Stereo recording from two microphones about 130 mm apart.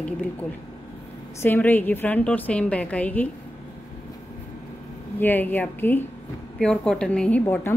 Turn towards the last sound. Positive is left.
turn(degrees=15)  # may be behind; listen again after turning